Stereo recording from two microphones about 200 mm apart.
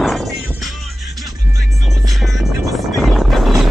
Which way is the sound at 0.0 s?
Centre (ahead or behind).